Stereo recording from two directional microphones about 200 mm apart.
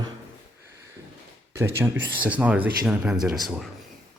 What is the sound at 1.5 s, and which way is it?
Speech, 10° right (ahead or behind).